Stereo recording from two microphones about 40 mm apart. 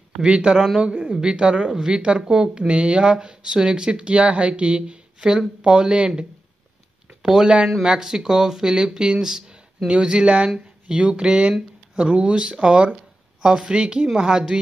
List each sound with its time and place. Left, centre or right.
0.2 s speech: right
1.7 s speech: centre
7.2 s speech: centre
13.4 s speech: centre